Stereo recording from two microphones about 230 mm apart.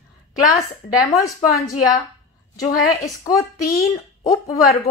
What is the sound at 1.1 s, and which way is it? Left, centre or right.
Speech, centre.